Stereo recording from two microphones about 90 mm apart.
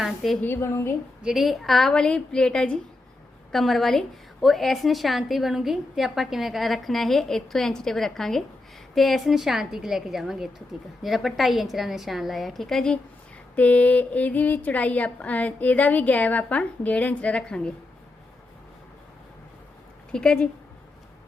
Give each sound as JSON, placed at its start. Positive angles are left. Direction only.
{"t": 0.0, "sound": "a woman's voice", "side_deg": 0}
{"t": 0.4, "sound": "a woman's voice", "side_deg": 25}
{"t": 1.2, "sound": "a woman's voice", "side_deg": -5}
{"t": 20.1, "sound": "speech", "side_deg": 10}